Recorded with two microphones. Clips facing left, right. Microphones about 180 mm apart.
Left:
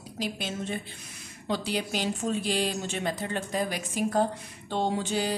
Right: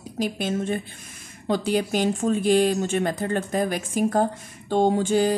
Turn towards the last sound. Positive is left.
turn(degrees=-50)  # may be behind; listen again after turning